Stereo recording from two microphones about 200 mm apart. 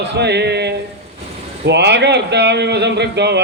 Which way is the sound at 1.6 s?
60° right (ahead or behind).